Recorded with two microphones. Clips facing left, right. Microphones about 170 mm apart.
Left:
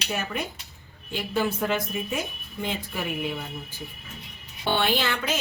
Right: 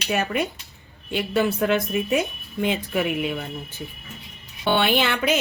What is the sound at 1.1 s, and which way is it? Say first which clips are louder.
A woman's voice: right 4 dB; 65° right (ahead or behind).